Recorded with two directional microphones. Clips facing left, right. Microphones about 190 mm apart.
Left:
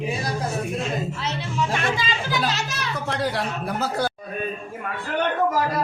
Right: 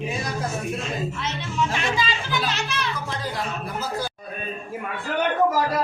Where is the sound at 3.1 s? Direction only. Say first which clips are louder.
Left 4 dB; 70° left (ahead or behind).